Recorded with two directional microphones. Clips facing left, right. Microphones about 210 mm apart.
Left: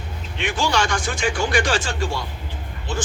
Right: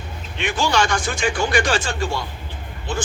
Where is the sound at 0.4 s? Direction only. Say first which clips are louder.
Right 2 dB; 50° right (ahead or behind).